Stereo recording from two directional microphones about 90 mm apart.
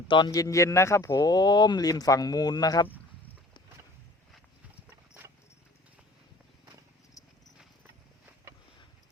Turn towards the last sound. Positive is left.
turn(degrees=40)  # may be behind; listen again after turning